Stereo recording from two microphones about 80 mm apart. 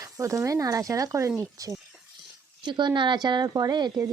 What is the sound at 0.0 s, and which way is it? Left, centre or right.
Speech, right.